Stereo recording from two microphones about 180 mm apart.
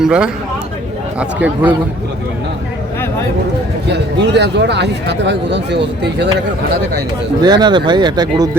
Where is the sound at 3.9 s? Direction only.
70° right (ahead or behind).